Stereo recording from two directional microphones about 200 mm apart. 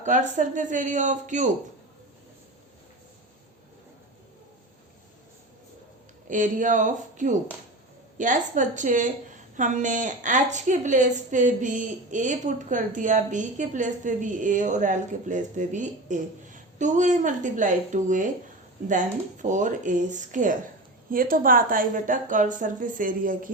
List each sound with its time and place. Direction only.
0.0 s a woman's voice: 40° right (ahead or behind)
6.2 s a woman's voice: 40° right (ahead or behind)